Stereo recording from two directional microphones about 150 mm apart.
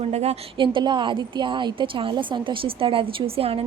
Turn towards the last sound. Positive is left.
turn(degrees=-40)  # may be behind; listen again after turning